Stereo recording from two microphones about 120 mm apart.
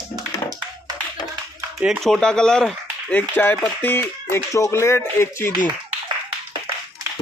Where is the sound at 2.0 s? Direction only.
5° left (ahead or behind); by 5.5 s 20° left (ahead or behind).